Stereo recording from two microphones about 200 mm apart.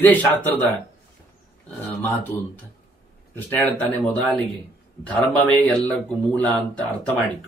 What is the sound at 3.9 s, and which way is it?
A man's voice, 5° left (ahead or behind).